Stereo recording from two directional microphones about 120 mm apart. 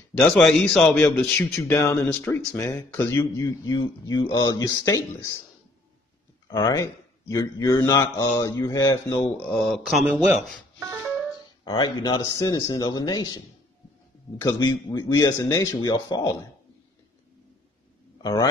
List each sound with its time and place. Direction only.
0.4 s a man's voice: 5° left (ahead or behind); by 5.3 s 30° left (ahead or behind)
6.4 s a sound: 35° left (ahead or behind)
6.7 s a man's voice: 25° left (ahead or behind)
9.7 s speech: centre (ahead or behind)
11.6 s a man's voice: 35° left (ahead or behind)
14.6 s a man's voice: 35° left (ahead or behind)
18.2 s a man's voice: 35° left (ahead or behind)